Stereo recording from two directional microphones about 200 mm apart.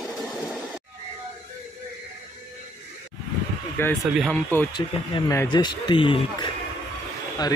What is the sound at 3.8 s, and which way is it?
Speech, 10° left (ahead or behind).